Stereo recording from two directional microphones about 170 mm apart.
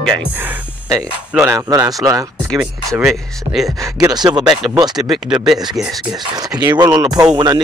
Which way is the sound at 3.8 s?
20° right (ahead or behind).